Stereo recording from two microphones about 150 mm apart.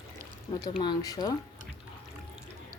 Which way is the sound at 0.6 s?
25° left (ahead or behind).